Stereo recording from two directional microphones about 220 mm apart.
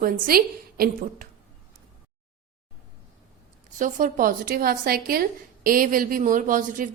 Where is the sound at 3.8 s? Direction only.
40° right (ahead or behind).